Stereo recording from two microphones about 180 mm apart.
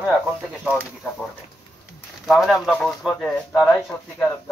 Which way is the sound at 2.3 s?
Centre (ahead or behind).